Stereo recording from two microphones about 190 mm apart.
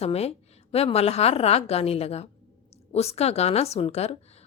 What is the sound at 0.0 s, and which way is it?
Speech, 35° left (ahead or behind).